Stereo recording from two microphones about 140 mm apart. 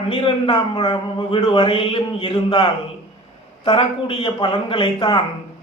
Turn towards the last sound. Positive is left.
turn(degrees=40)  # may be behind; listen again after turning